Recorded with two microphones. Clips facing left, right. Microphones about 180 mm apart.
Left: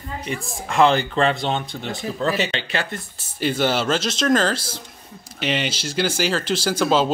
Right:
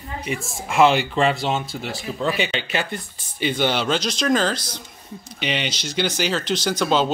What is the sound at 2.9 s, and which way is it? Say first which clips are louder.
Speech: even; 5° left (ahead or behind).